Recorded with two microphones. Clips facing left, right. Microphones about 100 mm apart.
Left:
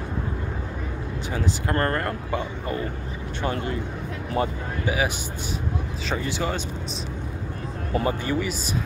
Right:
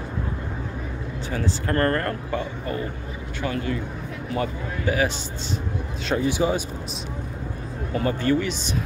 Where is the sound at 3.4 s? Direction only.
30° left (ahead or behind).